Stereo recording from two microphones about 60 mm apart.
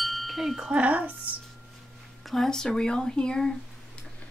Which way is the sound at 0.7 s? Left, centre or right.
Right.